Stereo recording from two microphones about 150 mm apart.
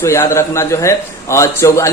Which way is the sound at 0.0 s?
20° left (ahead or behind).